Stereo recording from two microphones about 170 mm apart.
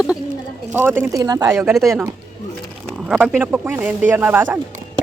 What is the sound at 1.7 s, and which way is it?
Speech, centre (ahead or behind).